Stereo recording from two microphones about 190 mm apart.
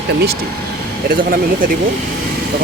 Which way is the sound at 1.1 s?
50° right (ahead or behind).